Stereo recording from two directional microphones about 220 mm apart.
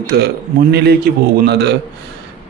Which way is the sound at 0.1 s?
50° right (ahead or behind).